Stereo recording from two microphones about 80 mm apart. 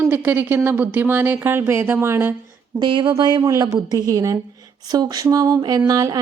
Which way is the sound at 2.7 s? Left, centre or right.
Right.